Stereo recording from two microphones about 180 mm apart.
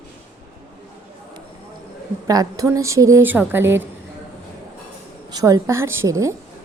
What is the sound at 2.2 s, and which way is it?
A woman's voice, 20° right (ahead or behind).